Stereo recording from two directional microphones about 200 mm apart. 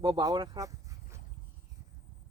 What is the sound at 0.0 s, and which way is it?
Speech, 20° right (ahead or behind).